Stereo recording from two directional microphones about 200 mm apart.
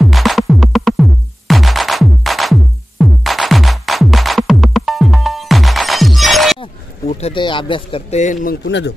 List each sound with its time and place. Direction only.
0.0 s music: centre (ahead or behind)
6.6 s speech: 30° left (ahead or behind)
8.6 s speech: 60° left (ahead or behind)